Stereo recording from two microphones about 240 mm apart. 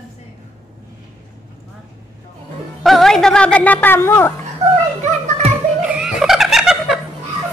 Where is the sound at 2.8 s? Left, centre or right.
Centre.